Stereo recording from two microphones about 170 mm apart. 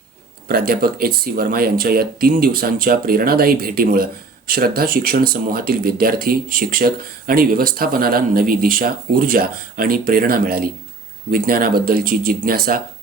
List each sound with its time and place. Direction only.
0.4 s speech: 65° right (ahead or behind)